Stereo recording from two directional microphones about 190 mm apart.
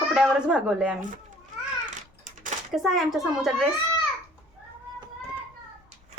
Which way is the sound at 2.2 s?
40° right (ahead or behind).